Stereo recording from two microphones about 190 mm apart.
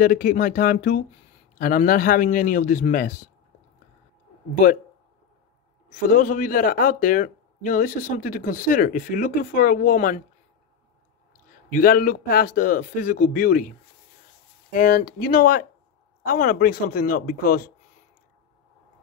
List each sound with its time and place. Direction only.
0.0 s a man's voice: 50° left (ahead or behind)
5.9 s a man's voice: 45° left (ahead or behind)
11.7 s a man's voice: 50° left (ahead or behind)